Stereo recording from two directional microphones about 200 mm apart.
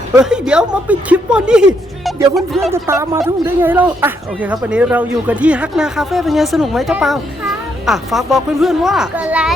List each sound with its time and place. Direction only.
0.2 s speech: 5° right (ahead or behind)
2.7 s speech: 15° right (ahead or behind)